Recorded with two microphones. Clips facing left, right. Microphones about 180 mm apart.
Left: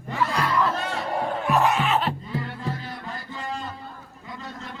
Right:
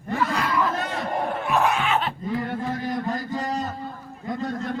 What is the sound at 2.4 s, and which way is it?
Music, 45° right (ahead or behind).